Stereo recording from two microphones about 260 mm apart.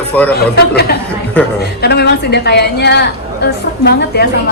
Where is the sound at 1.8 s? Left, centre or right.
Left.